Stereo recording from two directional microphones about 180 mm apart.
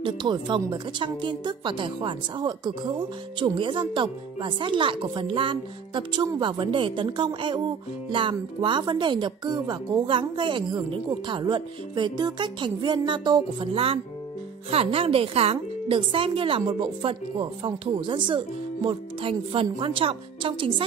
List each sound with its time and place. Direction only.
0.0 s speech: 25° right (ahead or behind)